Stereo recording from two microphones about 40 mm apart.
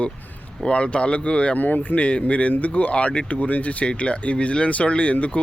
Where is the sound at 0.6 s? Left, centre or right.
Left.